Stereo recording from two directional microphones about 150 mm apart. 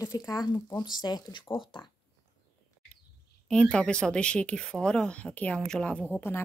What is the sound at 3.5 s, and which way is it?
Speech, 5° left (ahead or behind).